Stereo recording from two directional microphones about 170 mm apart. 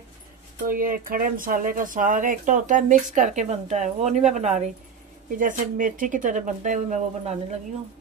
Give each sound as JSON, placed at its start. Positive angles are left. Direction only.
{"t": 0.7, "sound": "speech", "side_deg": -55}